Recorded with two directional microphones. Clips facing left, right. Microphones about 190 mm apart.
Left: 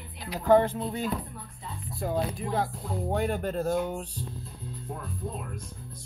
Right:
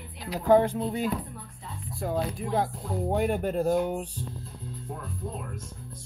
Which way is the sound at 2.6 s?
15° right (ahead or behind).